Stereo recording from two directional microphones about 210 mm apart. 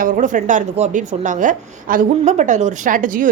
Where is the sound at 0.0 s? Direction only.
40° right (ahead or behind).